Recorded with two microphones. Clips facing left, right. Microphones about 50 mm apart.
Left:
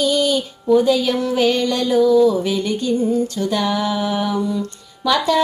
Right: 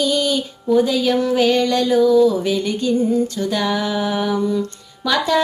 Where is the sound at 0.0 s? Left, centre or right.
Centre.